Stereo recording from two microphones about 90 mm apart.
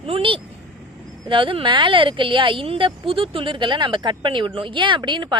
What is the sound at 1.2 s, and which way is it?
Speech, 70° right (ahead or behind).